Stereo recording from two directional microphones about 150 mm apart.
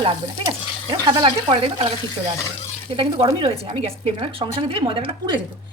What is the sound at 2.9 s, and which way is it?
A woman's voice, 35° right (ahead or behind).